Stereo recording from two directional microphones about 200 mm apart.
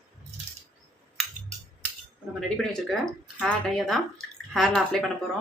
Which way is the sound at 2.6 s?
5° left (ahead or behind).